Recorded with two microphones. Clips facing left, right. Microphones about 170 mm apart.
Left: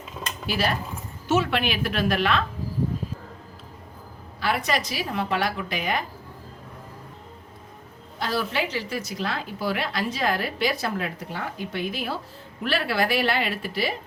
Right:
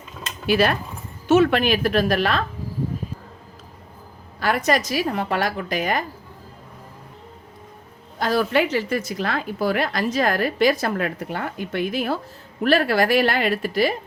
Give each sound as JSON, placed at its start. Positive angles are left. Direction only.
{"t": 0.4, "sound": "speech", "side_deg": -60}
{"t": 1.3, "sound": "a woman's voice", "side_deg": -50}
{"t": 4.4, "sound": "a woman's voice", "side_deg": -45}
{"t": 8.2, "sound": "a woman's voice", "side_deg": -50}